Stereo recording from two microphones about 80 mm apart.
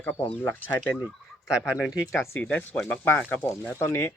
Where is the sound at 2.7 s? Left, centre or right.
Centre; by 4.1 s left.